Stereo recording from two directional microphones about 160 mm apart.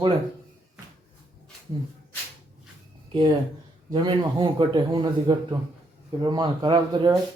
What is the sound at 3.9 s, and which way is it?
A man's voice, 30° right (ahead or behind).